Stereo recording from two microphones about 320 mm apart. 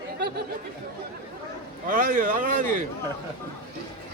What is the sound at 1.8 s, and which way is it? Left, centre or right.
Speech, right.